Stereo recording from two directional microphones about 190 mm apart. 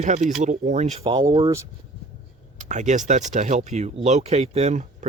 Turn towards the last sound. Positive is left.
turn(degrees=-35)  # may be behind; listen again after turning